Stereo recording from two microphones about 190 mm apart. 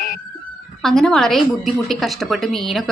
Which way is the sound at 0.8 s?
Centre (ahead or behind).